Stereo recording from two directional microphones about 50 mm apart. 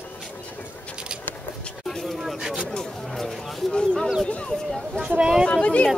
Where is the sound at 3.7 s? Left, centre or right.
Centre.